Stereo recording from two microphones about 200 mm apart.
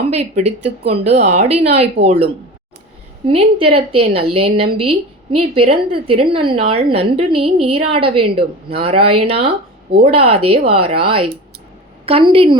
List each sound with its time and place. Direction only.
0.1 s a woman's voice: 30° right (ahead or behind)